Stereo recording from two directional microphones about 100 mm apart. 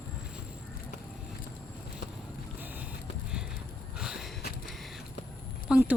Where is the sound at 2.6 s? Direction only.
20° right (ahead or behind).